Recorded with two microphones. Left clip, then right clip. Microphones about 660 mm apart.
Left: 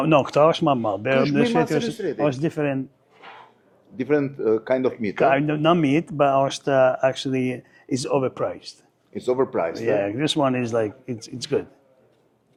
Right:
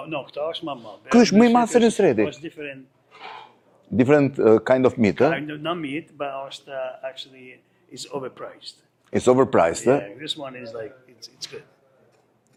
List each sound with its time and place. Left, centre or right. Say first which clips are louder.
0.0 s speech: left 12 dB; left
1.7 s speech: right 7 dB; right
2.2 s speech: left 6 dB; left
4.0 s speech: right 5 dB; right
5.1 s speech: left 2 dB; left
9.0 s speech: right 5 dB; right
10.0 s speech: left 10 dB; left